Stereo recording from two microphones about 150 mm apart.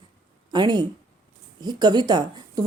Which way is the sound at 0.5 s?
30° right (ahead or behind).